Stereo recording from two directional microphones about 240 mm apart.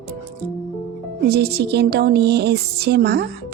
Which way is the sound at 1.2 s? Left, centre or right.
Right.